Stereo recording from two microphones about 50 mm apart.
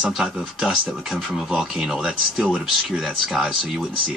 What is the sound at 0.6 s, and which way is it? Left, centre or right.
Speech, centre.